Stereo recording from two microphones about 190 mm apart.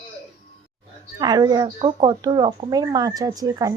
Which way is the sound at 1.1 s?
20° right (ahead or behind).